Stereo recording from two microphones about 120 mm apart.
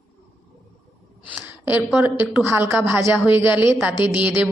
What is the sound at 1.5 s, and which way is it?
A woman's voice, 15° right (ahead or behind).